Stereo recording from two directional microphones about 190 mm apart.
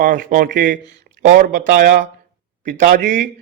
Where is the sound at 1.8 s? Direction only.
60° right (ahead or behind).